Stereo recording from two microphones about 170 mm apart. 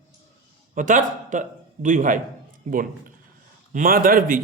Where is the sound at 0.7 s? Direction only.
50° right (ahead or behind).